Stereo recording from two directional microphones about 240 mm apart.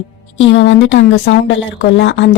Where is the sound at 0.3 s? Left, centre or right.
Left.